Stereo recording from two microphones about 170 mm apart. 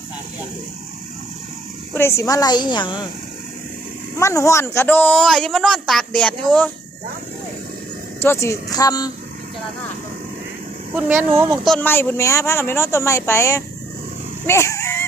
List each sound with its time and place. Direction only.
1.9 s a woman's voice: 15° left (ahead or behind)
4.1 s speech: 15° left (ahead or behind)
8.2 s a woman's voice: 15° left (ahead or behind)
10.9 s speech: 15° right (ahead or behind)
11.6 s speech: 5° left (ahead or behind)
14.4 s a sound: 15° left (ahead or behind)